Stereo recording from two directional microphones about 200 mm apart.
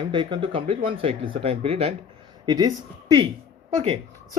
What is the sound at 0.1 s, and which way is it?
Speech, 25° right (ahead or behind).